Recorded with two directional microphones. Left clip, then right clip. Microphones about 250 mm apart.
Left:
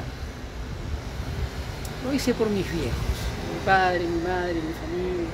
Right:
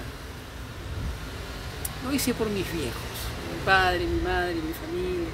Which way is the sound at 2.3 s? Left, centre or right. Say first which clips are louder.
Left 6 dB; centre.